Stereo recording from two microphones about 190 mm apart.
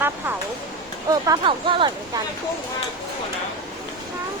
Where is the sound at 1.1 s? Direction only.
20° right (ahead or behind).